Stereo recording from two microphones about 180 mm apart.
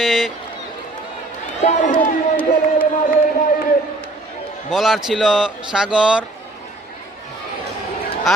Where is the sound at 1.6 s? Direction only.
45° left (ahead or behind).